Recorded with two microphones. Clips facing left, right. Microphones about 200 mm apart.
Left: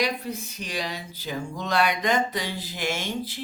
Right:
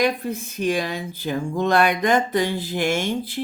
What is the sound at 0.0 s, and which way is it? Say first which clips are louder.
A woman's voice: right 6 dB; 50° right (ahead or behind).